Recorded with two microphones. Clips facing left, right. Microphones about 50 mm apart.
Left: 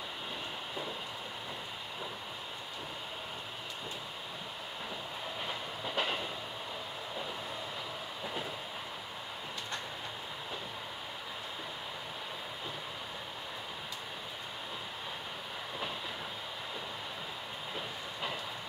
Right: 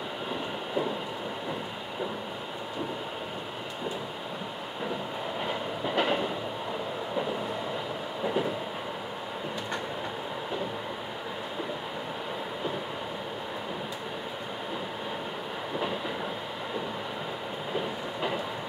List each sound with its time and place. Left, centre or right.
5.9 s train: right